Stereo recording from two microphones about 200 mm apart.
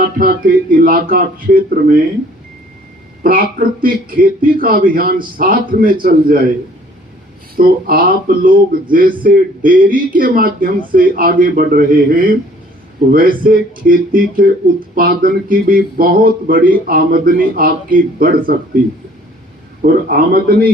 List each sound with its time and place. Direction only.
0.2 s speech: 45° right (ahead or behind)
3.2 s speech: 45° right (ahead or behind)
7.5 s speech: 45° right (ahead or behind)
19.8 s speech: 45° right (ahead or behind)